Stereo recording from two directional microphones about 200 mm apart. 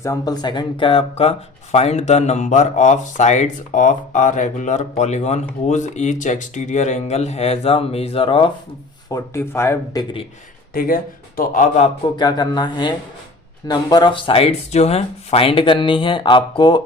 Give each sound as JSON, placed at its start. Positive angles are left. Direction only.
{"t": 0.0, "sound": "speech", "side_deg": 15}
{"t": 9.0, "sound": "speech", "side_deg": 15}
{"t": 10.8, "sound": "speech", "side_deg": 45}
{"t": 12.1, "sound": "speech", "side_deg": 20}